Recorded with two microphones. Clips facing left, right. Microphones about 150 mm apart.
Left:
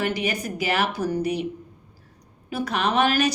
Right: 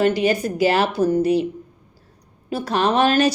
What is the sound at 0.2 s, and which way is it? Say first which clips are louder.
A woman's voice: right 9 dB; 30° right (ahead or behind).